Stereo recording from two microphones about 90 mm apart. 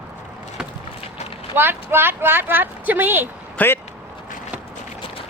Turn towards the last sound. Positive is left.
turn(degrees=20)  # may be behind; listen again after turning